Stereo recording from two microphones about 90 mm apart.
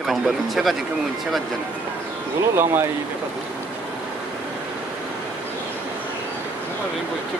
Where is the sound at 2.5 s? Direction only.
25° right (ahead or behind).